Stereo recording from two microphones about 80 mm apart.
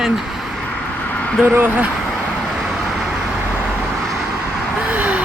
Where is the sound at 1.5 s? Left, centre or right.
Right.